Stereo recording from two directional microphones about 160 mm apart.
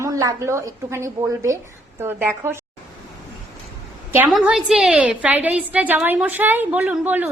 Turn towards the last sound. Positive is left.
turn(degrees=-10)  # may be behind; listen again after turning